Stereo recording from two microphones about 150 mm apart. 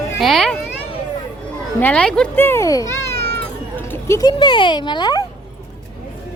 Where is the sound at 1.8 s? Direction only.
5° left (ahead or behind).